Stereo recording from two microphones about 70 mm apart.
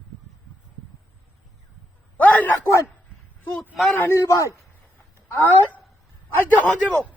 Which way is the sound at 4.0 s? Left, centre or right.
Left.